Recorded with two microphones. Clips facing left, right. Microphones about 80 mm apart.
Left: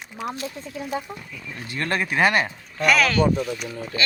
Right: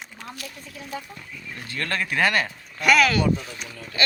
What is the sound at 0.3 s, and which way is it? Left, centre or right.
Speech, left.